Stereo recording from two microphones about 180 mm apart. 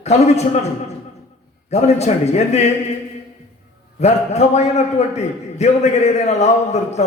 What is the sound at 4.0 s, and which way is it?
A man's voice, 35° left (ahead or behind).